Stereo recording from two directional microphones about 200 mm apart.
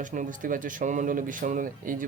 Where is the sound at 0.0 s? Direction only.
40° right (ahead or behind).